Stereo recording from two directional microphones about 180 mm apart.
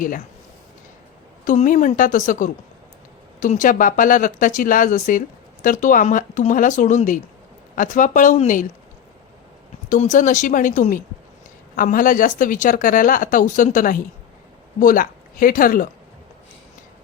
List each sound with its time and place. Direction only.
1.5 s speech: 45° left (ahead or behind)
9.9 s speech: 45° left (ahead or behind)